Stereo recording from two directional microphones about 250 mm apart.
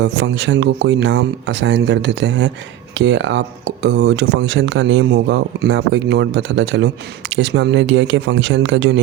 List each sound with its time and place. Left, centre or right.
0.0 s speech: right